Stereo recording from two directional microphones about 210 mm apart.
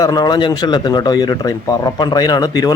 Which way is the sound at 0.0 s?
15° left (ahead or behind).